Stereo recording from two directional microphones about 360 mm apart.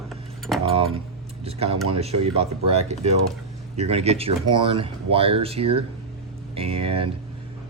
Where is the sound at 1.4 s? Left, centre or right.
Centre.